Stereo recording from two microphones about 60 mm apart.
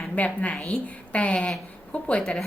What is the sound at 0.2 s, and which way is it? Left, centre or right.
A woman's voice, centre.